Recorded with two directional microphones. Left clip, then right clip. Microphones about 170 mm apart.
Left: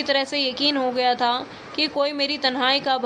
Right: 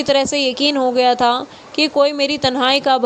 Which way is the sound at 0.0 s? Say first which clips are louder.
Right 6 dB; 40° right (ahead or behind).